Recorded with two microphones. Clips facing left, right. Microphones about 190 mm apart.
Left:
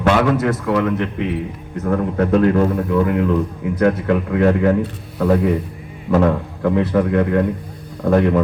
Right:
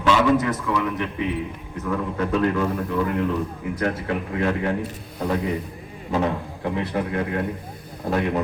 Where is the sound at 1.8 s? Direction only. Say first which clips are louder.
Left 7 dB; 50° left (ahead or behind).